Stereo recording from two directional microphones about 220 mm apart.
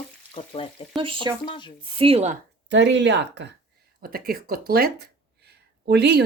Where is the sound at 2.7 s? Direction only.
55° right (ahead or behind).